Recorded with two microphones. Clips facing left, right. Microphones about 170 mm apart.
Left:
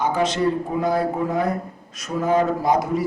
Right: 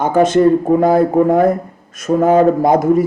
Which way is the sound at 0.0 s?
50° right (ahead or behind).